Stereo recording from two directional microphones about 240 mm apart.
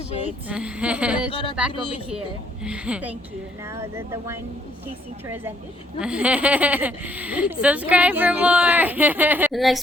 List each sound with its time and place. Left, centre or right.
0.4 s speech: centre
1.3 s speech: left
2.6 s speech: centre
6.0 s speech: centre